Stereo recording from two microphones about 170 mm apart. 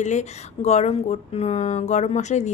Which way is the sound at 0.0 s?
45° left (ahead or behind).